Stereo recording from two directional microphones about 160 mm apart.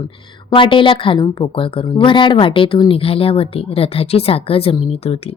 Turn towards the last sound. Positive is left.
turn(degrees=40)  # may be behind; listen again after turning